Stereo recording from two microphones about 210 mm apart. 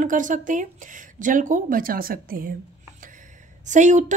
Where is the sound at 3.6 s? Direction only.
35° right (ahead or behind).